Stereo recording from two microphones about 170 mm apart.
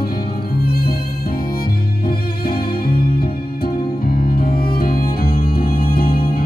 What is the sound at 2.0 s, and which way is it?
Music, 60° left (ahead or behind).